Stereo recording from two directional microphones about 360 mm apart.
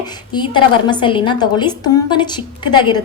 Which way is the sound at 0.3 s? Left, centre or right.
Centre.